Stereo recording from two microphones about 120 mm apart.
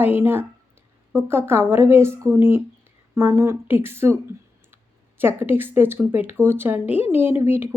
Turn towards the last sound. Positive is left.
turn(degrees=-20)  # may be behind; listen again after turning